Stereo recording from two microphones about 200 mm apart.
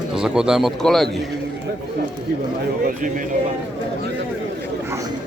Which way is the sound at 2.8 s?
45° right (ahead or behind).